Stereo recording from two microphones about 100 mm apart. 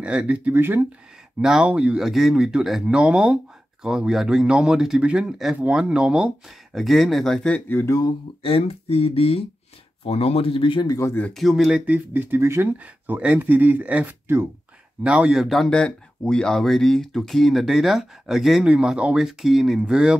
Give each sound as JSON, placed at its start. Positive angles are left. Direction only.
{"t": 0.0, "sound": "speech", "side_deg": -10}
{"t": 0.5, "sound": "speech", "side_deg": -20}
{"t": 1.4, "sound": "speech", "side_deg": -5}
{"t": 7.5, "sound": "speech", "side_deg": 20}
{"t": 8.4, "sound": "speech", "side_deg": 70}
{"t": 10.0, "sound": "speech", "side_deg": 90}
{"t": 10.9, "sound": "speech", "side_deg": 30}
{"t": 11.3, "sound": "speech", "side_deg": -5}
{"t": 11.8, "sound": "speech", "side_deg": -20}
{"t": 15.0, "sound": "speech", "side_deg": -10}
{"t": 15.4, "sound": "speech", "side_deg": 0}